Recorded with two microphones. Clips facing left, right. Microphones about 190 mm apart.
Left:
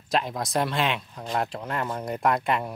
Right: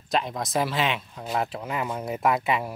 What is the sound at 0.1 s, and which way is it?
Speech, centre (ahead or behind).